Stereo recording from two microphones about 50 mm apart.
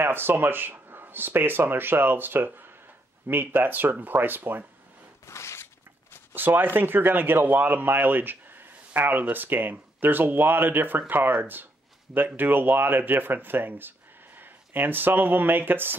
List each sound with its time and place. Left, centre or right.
0.0 s speech: right
5.2 s a sound: left
6.3 s speech: right